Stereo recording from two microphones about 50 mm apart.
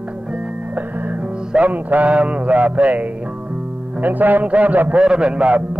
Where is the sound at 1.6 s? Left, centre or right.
Right.